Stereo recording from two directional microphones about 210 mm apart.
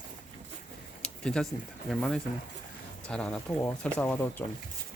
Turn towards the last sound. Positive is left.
turn(degrees=10)  # may be behind; listen again after turning